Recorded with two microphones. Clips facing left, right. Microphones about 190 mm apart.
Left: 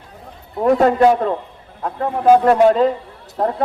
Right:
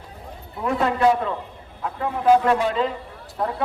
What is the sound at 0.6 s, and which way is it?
A man's voice, 45° left (ahead or behind).